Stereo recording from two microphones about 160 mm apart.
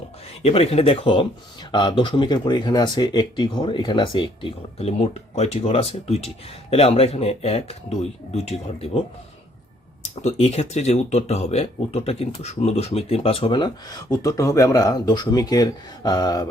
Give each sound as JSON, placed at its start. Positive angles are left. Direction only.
{"t": 0.4, "sound": "speech", "side_deg": 40}
{"t": 10.0, "sound": "speech", "side_deg": 45}